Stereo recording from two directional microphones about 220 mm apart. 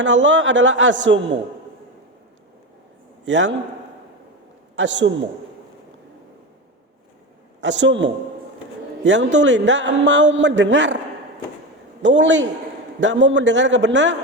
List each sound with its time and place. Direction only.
0.0 s a man's voice: 55° right (ahead or behind)
3.2 s a man's voice: 55° right (ahead or behind)
4.8 s a man's voice: 55° right (ahead or behind)
7.6 s a man's voice: 55° right (ahead or behind)
12.0 s a man's voice: 55° right (ahead or behind)